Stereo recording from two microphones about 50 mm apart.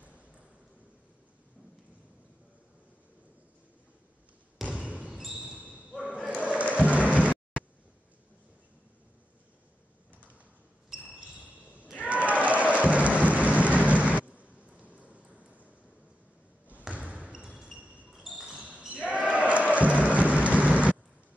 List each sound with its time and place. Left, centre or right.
4.6 s basketball bounce: right
6.4 s music: right
11.3 s basketball bounce: right
12.1 s music: right
17.3 s basketball bounce: centre
17.7 s basketball bounce: right
18.1 s basketball bounce: centre
19.0 s basketball bounce: right
19.7 s music: right
20.1 s rain: right